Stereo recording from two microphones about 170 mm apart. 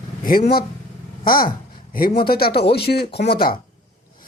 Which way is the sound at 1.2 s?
60° left (ahead or behind).